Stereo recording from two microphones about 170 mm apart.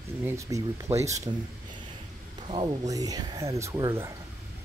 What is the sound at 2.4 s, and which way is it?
Speech, 25° right (ahead or behind).